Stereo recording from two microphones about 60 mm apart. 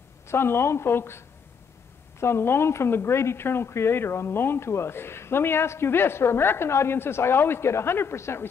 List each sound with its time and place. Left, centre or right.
0.3 s speech: left